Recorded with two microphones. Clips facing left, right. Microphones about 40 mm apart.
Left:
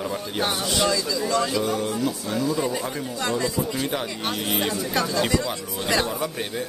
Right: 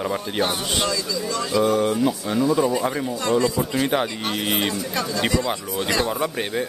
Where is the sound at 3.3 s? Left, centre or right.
Centre.